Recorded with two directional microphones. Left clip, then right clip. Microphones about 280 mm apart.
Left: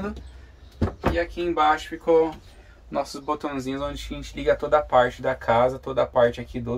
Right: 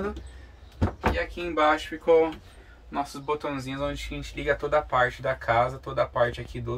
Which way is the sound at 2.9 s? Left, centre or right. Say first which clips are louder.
Left 2 dB; left.